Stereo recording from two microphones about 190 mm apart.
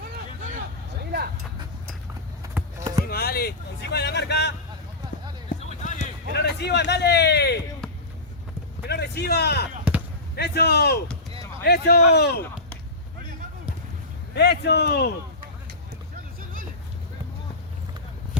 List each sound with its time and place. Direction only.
0.5 s a sound: 55° right (ahead or behind)
2.6 s clip-clop: 15° right (ahead or behind)
3.1 s a sound: 55° left (ahead or behind)
5.5 s run: 40° left (ahead or behind)
6.3 s speech: 60° left (ahead or behind)
8.9 s speech: 60° left (ahead or behind)
14.3 s speech: 60° left (ahead or behind)
16.4 s vehicle: 45° right (ahead or behind)